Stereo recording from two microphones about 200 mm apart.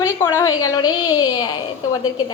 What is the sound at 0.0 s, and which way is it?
A woman's voice, 15° left (ahead or behind).